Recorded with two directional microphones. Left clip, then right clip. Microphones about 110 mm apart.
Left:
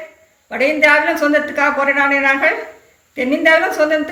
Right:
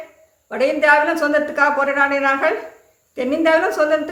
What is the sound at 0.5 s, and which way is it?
A woman's voice, 30° right (ahead or behind).